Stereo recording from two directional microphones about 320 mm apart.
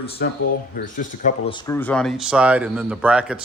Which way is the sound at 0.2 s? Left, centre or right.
Left.